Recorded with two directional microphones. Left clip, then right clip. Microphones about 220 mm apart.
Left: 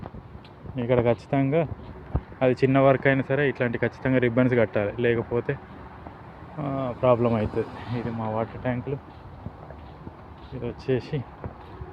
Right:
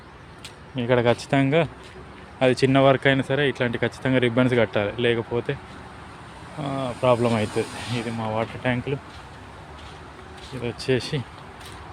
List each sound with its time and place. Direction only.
0.8 s speech: 15° right (ahead or behind)
6.6 s speech: 10° right (ahead or behind)
10.6 s speech: 15° right (ahead or behind)